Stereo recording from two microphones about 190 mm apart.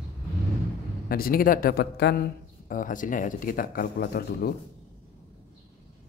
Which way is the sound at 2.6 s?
45° left (ahead or behind).